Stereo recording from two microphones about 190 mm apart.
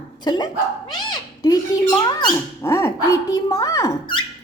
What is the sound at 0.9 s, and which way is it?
Cat, 20° left (ahead or behind).